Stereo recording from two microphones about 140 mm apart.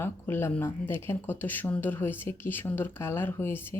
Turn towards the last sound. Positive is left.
turn(degrees=15)  # may be behind; listen again after turning